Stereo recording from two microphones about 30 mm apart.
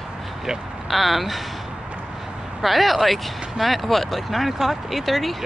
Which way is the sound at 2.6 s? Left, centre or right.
Centre.